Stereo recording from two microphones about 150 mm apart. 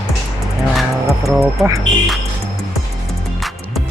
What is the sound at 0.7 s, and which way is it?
Speech, centre (ahead or behind).